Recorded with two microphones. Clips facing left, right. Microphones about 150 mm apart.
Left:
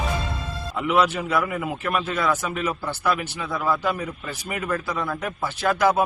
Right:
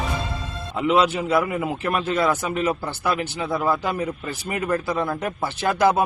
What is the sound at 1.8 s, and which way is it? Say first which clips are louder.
Speech: right 3 dB; 35° right (ahead or behind).